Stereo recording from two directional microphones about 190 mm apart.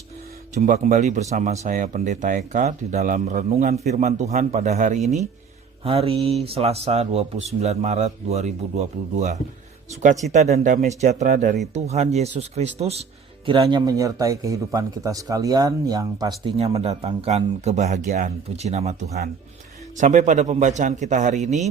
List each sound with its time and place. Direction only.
0.5 s speech: 40° right (ahead or behind); by 16.3 s 20° right (ahead or behind)
16.7 s speech: 35° right (ahead or behind)
20.0 s speech: 40° right (ahead or behind)